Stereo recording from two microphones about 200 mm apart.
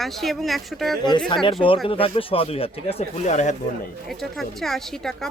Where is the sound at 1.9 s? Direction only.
25° left (ahead or behind).